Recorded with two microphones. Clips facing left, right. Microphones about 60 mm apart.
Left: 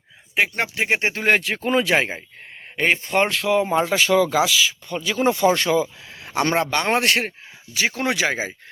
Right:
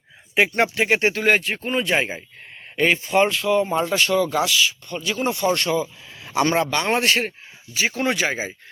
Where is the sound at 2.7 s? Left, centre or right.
Left.